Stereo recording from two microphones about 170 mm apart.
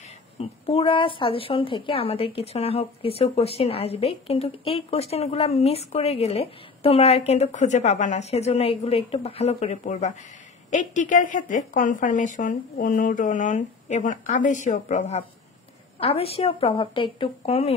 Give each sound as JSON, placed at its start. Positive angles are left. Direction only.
{"t": 0.4, "sound": "a woman's voice", "side_deg": 35}